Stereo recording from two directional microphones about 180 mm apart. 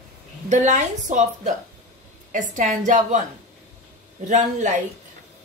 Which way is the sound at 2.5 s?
45° right (ahead or behind).